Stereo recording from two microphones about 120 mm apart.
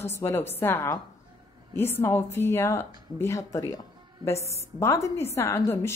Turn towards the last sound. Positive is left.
turn(degrees=25)  # may be behind; listen again after turning